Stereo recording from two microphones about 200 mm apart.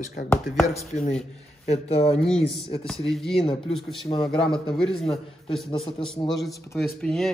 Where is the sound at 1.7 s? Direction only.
30° left (ahead or behind).